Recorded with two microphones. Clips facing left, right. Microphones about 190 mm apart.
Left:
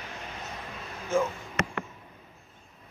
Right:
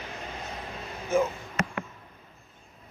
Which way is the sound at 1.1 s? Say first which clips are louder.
Right 2 dB; 15° right (ahead or behind).